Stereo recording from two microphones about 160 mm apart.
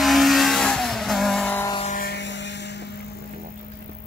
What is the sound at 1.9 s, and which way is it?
Vehicle, 80° left.